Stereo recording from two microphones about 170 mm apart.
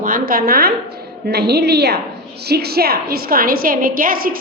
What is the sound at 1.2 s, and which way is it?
A woman's voice, 75° right (ahead or behind).